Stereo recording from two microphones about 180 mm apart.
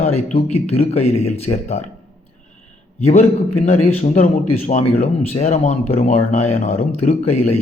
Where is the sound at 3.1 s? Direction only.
40° left (ahead or behind).